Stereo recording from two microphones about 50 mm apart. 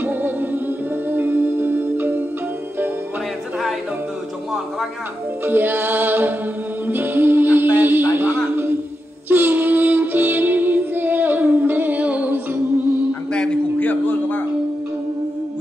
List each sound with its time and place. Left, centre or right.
0.0 s music: right
5.4 s music: right
13.7 s a sound: left